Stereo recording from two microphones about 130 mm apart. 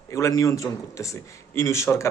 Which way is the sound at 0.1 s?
25° left (ahead or behind).